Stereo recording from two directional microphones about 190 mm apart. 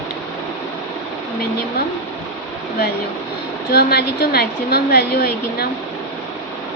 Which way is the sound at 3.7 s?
55° left (ahead or behind).